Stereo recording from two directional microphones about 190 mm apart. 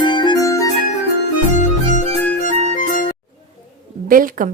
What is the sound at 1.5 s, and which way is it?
Music, 40° left (ahead or behind).